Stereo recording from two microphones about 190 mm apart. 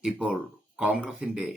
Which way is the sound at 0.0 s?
5° right (ahead or behind).